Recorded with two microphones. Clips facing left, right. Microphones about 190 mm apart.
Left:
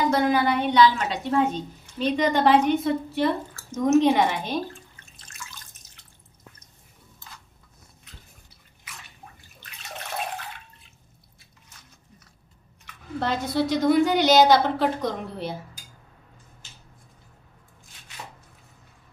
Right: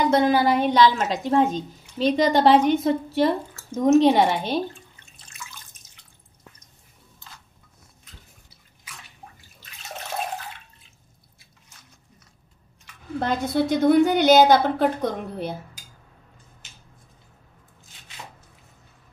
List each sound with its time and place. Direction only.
0.1 s a woman's voice: 30° right (ahead or behind)
13.2 s a woman's voice: 50° right (ahead or behind)